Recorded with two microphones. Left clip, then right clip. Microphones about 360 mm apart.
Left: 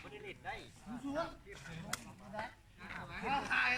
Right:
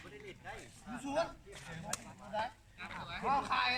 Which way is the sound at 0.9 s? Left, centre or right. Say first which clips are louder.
Right 2 dB; right.